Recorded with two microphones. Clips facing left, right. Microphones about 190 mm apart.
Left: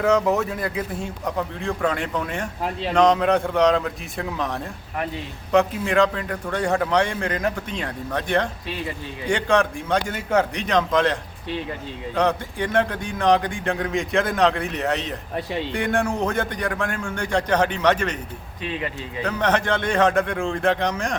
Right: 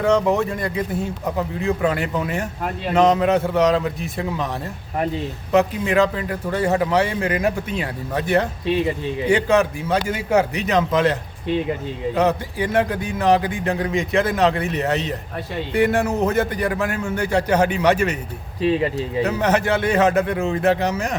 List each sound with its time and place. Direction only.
0.0 s a man's voice: centre (ahead or behind)
5.5 s a man's voice: 5° right (ahead or behind)
18.6 s speech: 30° right (ahead or behind)
19.2 s a man's voice: 5° right (ahead or behind)